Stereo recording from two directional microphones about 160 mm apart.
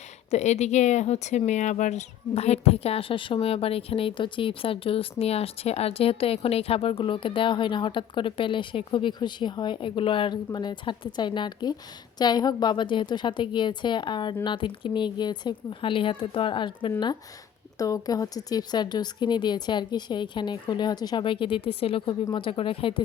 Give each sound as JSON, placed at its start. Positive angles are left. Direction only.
{"t": 0.3, "sound": "speech", "side_deg": 45}